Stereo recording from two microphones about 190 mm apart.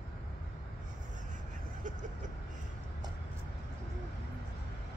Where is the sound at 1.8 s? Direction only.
40° right (ahead or behind).